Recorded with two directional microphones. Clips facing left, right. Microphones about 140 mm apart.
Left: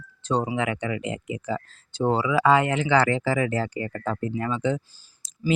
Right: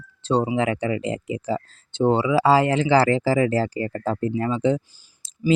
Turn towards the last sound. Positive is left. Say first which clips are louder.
# right 4 dB
turn(degrees=-25)  # may be behind; listen again after turning